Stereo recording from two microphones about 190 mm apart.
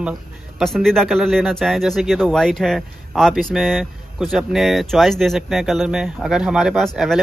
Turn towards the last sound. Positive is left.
turn(degrees=0)  # may be behind; listen again after turning